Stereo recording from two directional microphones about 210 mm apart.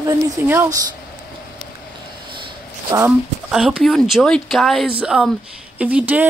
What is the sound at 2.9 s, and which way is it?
A man's voice, 5° right (ahead or behind).